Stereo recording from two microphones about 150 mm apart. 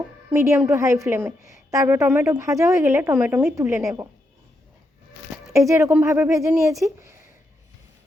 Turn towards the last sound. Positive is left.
turn(degrees=-20)  # may be behind; listen again after turning